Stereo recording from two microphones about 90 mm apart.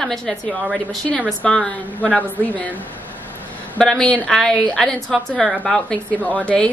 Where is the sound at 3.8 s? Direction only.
5° left (ahead or behind).